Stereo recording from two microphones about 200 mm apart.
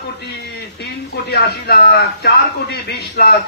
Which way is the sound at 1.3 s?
55° left (ahead or behind).